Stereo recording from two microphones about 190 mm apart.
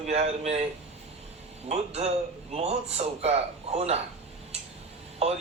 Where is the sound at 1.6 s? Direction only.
35° right (ahead or behind).